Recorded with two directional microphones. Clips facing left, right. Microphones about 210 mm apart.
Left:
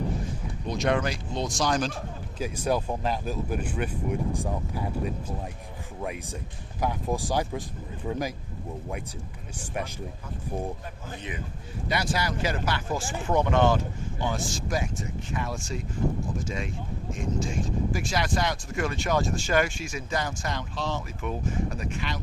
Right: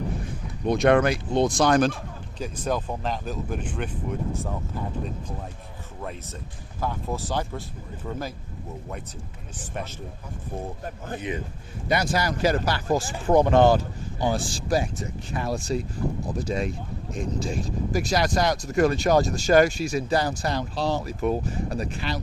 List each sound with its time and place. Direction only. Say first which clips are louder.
0.7 s speech: right 7 dB; 60° right (ahead or behind)
2.4 s speech: left 1 dB; 10° left (ahead or behind)
9.6 s speech: left 1 dB; 10° left (ahead or behind)
11.9 s speech: right 4 dB; 45° right (ahead or behind)